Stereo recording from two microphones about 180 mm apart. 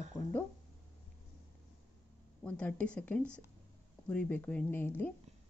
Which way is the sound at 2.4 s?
5° left (ahead or behind).